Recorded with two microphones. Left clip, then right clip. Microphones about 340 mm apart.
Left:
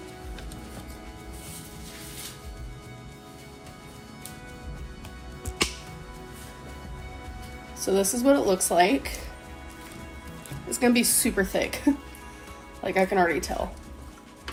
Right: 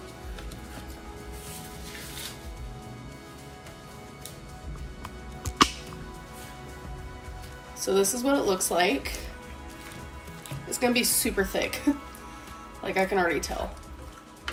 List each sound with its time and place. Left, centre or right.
7.8 s speech: left
10.7 s speech: left